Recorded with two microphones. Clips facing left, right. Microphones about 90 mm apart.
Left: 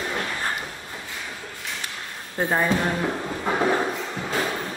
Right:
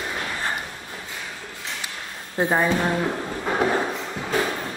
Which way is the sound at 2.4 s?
10° right (ahead or behind).